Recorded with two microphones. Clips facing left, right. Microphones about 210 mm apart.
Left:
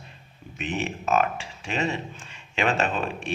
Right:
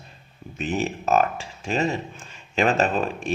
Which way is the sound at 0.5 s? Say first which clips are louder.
Right 4 dB; 40° right (ahead or behind).